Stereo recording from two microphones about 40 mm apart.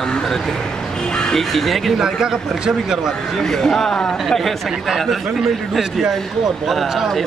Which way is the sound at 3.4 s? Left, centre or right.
Centre.